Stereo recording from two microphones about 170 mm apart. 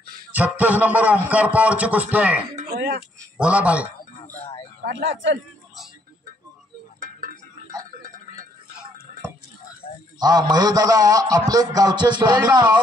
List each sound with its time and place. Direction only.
0.3 s music: 10° right (ahead or behind)
2.7 s speech: 65° right (ahead or behind)
3.3 s music: 5° right (ahead or behind)
4.8 s speech: 90° right
10.1 s a man's voice: 25° right (ahead or behind)